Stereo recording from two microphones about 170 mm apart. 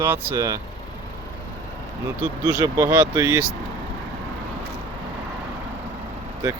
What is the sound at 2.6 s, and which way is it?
Speech, 20° right (ahead or behind).